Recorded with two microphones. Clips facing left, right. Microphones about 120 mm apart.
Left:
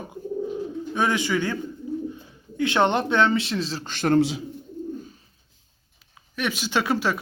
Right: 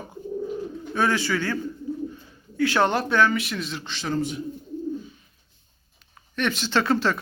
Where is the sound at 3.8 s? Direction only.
55° left (ahead or behind).